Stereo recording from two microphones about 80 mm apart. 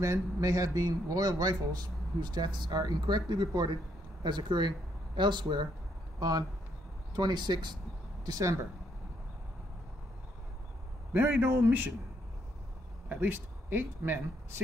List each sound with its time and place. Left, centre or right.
0.0 s a man's voice: right
6.1 s a man's voice: right
8.3 s speech: right
11.1 s speech: right
13.1 s speech: right